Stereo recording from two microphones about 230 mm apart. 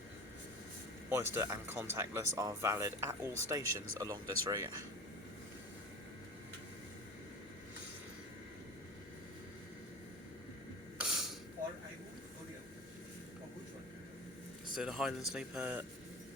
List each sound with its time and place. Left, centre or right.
1.1 s speech: centre
11.0 s mechanisms: centre
14.8 s speech: centre